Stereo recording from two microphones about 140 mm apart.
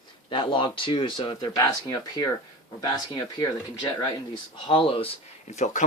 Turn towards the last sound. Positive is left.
turn(degrees=60)  # may be behind; listen again after turning